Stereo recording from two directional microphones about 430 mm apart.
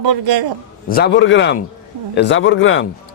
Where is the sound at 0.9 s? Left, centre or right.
Left.